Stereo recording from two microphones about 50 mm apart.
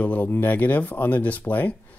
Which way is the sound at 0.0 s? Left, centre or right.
Left.